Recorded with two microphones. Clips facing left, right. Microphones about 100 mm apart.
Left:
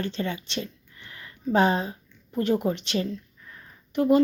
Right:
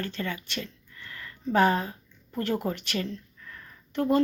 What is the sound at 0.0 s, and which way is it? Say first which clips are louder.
A woman's voice: left 3 dB; 20° left (ahead or behind).